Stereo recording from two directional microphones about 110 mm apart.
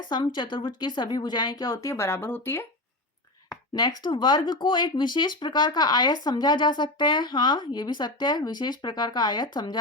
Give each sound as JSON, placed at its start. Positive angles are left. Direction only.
{"t": 0.0, "sound": "speech", "side_deg": 45}
{"t": 3.8, "sound": "speech", "side_deg": 35}